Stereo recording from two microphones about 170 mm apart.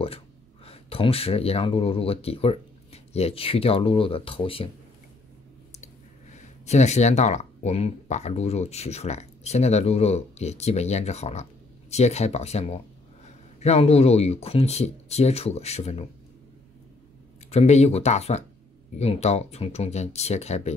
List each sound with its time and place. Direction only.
0.7 s speech: 35° left (ahead or behind)
6.3 s speech: 40° left (ahead or behind)
17.5 s speech: 40° left (ahead or behind)